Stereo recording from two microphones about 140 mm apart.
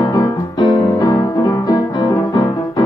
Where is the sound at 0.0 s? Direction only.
30° left (ahead or behind).